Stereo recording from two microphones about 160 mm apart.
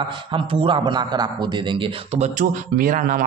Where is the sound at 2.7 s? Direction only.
55° right (ahead or behind).